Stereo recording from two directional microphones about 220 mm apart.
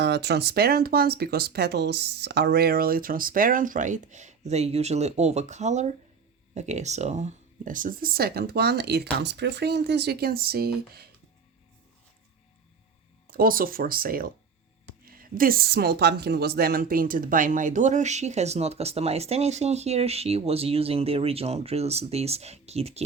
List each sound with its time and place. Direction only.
0.0 s speech: 50° right (ahead or behind)
13.3 s speech: 40° right (ahead or behind)